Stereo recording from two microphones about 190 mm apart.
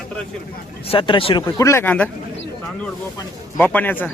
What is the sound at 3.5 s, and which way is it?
Speech, 10° left (ahead or behind).